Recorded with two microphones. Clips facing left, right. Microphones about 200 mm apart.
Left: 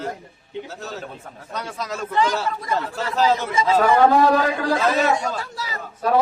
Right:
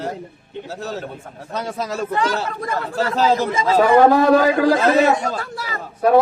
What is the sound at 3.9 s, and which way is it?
A man's voice, 55° right (ahead or behind).